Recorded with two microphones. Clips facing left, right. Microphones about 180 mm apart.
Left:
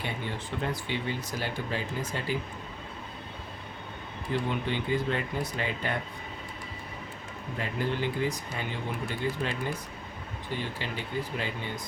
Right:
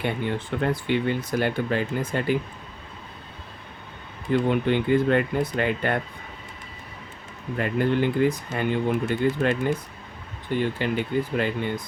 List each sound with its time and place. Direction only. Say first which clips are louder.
0.0 s speech: right 8 dB; 55° right (ahead or behind)
4.4 s speech: right 10 dB; 55° right (ahead or behind)
7.6 s speech: right 8 dB; 55° right (ahead or behind)
10.6 s speech: right 14 dB; 60° right (ahead or behind)